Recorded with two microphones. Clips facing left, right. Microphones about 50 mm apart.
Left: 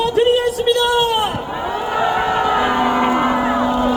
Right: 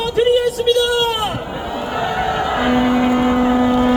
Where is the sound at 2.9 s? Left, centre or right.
Left.